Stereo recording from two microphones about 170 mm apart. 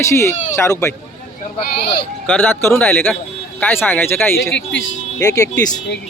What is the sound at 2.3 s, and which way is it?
Speech, 10° left (ahead or behind).